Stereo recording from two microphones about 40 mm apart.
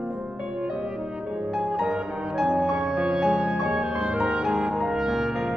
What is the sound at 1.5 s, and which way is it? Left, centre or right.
Music, centre.